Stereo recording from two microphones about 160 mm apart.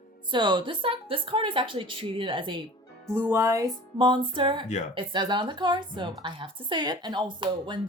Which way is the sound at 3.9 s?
30° right (ahead or behind).